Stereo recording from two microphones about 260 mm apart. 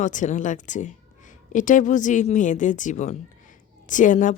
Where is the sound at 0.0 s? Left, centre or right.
Left.